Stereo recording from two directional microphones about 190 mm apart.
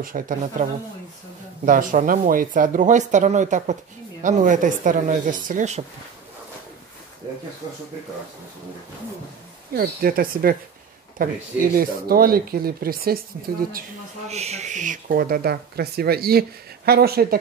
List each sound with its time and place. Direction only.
0.0 s speech: 45° right (ahead or behind)
1.7 s speech: 45° right (ahead or behind)
9.8 s speech: 50° right (ahead or behind)
14.3 s speech: 35° right (ahead or behind); by 17.4 s 55° right (ahead or behind)